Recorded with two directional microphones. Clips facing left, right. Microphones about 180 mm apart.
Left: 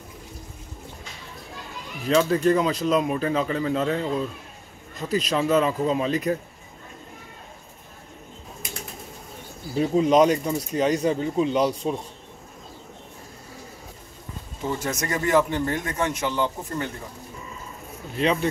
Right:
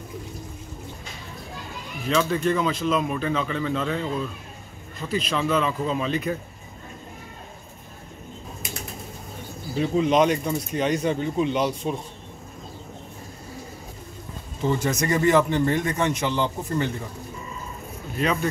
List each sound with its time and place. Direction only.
2.0 s speech: 35° left (ahead or behind)
9.8 s speech: 40° left (ahead or behind)
14.6 s a man's voice: 5° left (ahead or behind)
18.1 s speech: 30° left (ahead or behind)